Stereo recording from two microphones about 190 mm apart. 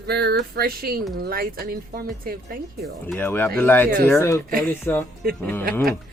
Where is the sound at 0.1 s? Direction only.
55° right (ahead or behind).